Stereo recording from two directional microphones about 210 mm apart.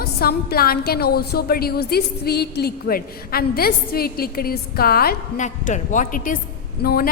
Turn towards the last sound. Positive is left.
turn(degrees=50)  # may be behind; listen again after turning